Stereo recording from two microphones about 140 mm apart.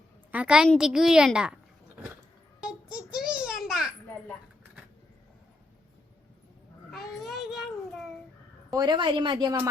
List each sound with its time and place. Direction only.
0.3 s a woman's voice: 10° right (ahead or behind)
2.9 s a sound: 5° right (ahead or behind)
6.9 s child singing: centre (ahead or behind)
8.7 s speech: 30° right (ahead or behind)